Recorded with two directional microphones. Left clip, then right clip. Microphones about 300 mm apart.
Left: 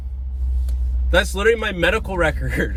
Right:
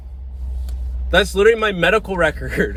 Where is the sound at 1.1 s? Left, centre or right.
Centre.